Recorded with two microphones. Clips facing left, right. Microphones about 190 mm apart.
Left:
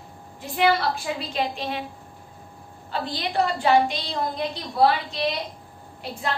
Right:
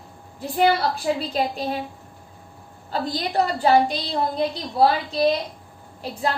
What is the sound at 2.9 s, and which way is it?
A woman's voice, 40° right (ahead or behind).